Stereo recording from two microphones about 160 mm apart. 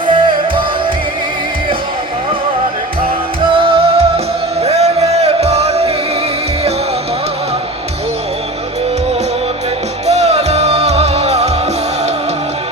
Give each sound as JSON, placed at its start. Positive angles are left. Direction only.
{"t": 0.1, "sound": "music", "side_deg": -30}
{"t": 3.5, "sound": "music", "side_deg": -35}
{"t": 10.1, "sound": "music", "side_deg": -40}